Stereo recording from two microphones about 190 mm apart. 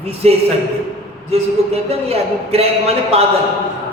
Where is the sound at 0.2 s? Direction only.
35° right (ahead or behind).